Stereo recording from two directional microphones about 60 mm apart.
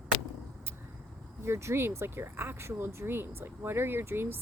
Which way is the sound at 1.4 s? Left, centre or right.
Right.